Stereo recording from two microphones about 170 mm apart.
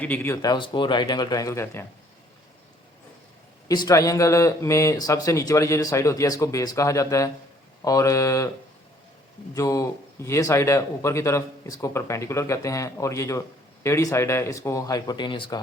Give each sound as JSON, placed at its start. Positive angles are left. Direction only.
{"t": 0.0, "sound": "a man's voice", "side_deg": 10}
{"t": 0.4, "sound": "speech", "side_deg": 25}
{"t": 3.7, "sound": "speech", "side_deg": 20}
{"t": 9.6, "sound": "a man's voice", "side_deg": 20}